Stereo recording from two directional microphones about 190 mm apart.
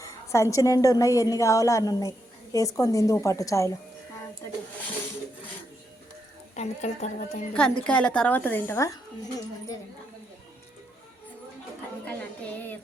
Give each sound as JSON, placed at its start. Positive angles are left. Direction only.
{"t": 0.0, "sound": "a woman's voice", "side_deg": 15}
{"t": 6.6, "sound": "speech", "side_deg": 40}
{"t": 7.5, "sound": "a woman's voice", "side_deg": 5}